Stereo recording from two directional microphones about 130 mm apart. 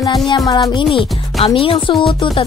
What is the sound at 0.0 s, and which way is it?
Music, 30° left (ahead or behind).